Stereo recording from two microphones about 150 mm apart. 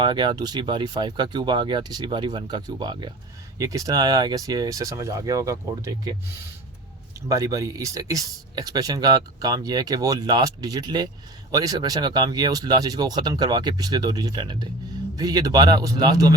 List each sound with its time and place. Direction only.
0.0 s speech: 30° right (ahead or behind)
7.3 s speech: 20° right (ahead or behind)